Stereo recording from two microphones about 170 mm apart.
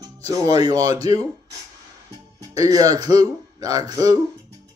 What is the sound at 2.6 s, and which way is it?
A man's voice, 20° right (ahead or behind).